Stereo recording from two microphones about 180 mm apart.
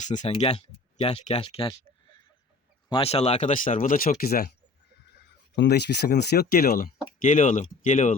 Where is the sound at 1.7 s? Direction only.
25° left (ahead or behind).